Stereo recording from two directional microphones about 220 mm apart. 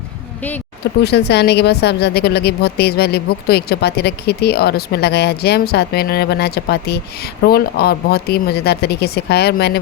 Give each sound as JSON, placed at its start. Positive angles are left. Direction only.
{"t": 1.0, "sound": "speech", "side_deg": 50}